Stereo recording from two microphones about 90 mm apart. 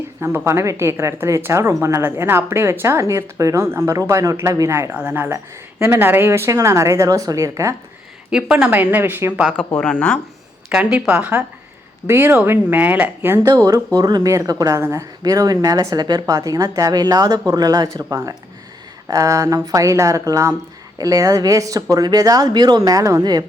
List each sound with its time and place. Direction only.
0.2 s speech: 30° right (ahead or behind)
4.9 s speech: 20° right (ahead or behind); by 7.8 s 35° right (ahead or behind)
8.3 s speech: 10° right (ahead or behind)
8.7 s speech: 20° right (ahead or behind)
9.8 s speech: 10° left (ahead or behind)
10.7 s speech: 10° right (ahead or behind)
12.0 s speech: 25° right (ahead or behind)
13.5 s speech: 45° right (ahead or behind)
14.8 s speech: 30° right (ahead or behind)
15.2 s speech: 45° right (ahead or behind)